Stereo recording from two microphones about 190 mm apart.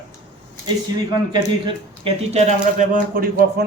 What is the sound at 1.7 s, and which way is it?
Speech, 30° right (ahead or behind).